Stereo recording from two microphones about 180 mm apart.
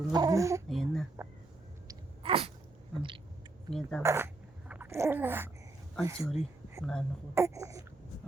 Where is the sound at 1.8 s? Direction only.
30° right (ahead or behind).